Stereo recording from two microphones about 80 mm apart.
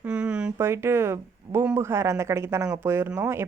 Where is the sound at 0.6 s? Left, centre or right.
Right.